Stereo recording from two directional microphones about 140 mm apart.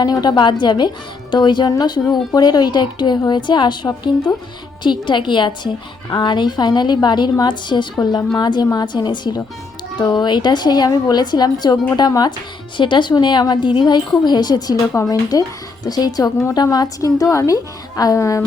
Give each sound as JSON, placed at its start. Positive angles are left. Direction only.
{"t": 0.0, "sound": "a woman's voice", "side_deg": 30}